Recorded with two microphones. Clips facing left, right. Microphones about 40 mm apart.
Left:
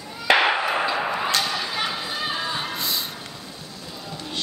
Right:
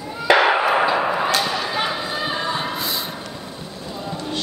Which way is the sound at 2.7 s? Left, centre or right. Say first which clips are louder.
Right 2 dB; centre.